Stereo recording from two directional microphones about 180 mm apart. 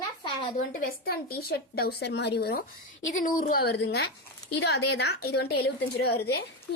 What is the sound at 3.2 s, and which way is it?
A woman's voice, 50° left (ahead or behind).